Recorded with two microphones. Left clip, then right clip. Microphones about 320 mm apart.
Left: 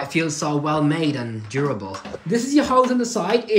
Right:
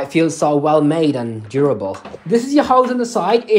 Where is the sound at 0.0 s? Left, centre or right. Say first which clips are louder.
Right 7 dB; centre.